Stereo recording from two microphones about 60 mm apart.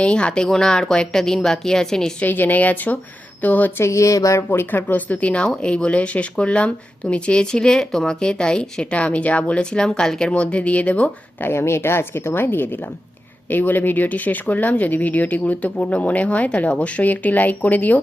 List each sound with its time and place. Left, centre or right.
0.0 s speech: centre
2.2 s speech: left
3.8 s a sound: left
4.4 s speech: left
11.3 s a woman's voice: left